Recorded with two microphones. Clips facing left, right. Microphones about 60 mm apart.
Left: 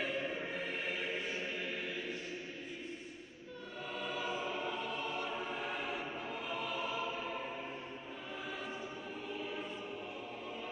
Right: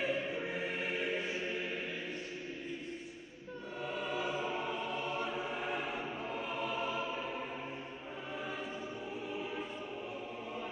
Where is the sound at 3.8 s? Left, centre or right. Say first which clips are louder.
Right 3 dB; centre.